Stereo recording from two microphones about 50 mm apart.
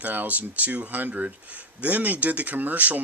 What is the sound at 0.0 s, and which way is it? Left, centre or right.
Speech, right.